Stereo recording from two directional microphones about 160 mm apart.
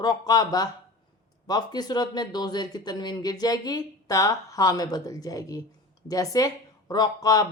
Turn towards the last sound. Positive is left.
turn(degrees=20)  # may be behind; listen again after turning